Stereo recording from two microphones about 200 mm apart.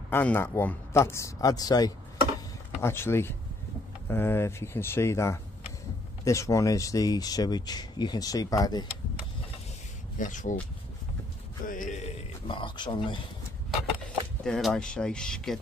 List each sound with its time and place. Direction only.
0.1 s speech: 10° left (ahead or behind)
10.1 s speech: 40° left (ahead or behind)
11.6 s speech: 40° left (ahead or behind)
12.4 s speech: 25° left (ahead or behind)
14.4 s speech: centre (ahead or behind)